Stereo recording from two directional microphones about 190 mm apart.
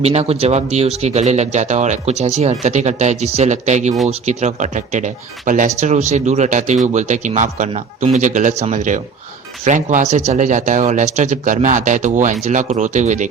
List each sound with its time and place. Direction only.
0.0 s speech: 35° right (ahead or behind)